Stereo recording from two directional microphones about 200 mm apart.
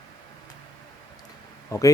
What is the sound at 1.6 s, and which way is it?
Speech, 15° left (ahead or behind).